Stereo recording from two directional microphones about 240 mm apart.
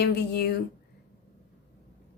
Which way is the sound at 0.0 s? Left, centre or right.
Left.